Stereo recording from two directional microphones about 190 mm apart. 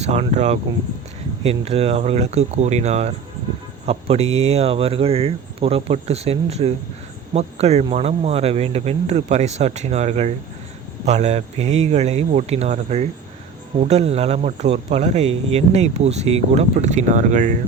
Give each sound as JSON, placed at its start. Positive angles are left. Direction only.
{"t": 0.0, "sound": "speech", "side_deg": -35}